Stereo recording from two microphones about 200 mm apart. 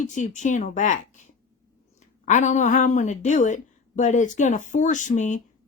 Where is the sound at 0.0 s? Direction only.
40° left (ahead or behind).